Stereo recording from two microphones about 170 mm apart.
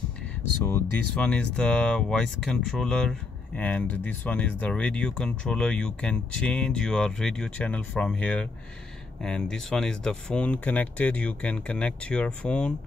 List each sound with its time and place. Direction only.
0.7 s speech: 10° left (ahead or behind)